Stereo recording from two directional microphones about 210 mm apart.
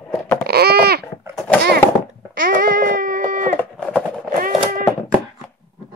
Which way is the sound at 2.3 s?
40° right (ahead or behind).